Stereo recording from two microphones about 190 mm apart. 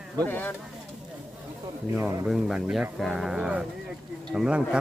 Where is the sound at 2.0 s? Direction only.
10° right (ahead or behind).